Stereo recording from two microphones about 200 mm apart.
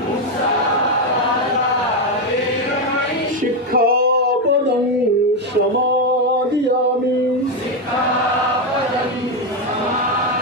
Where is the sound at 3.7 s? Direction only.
50° right (ahead or behind).